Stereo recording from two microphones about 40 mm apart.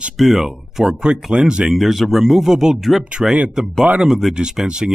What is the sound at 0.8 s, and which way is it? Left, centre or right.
Speech, right.